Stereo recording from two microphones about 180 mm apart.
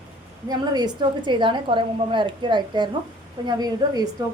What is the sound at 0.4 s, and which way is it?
A woman's voice, 25° right (ahead or behind).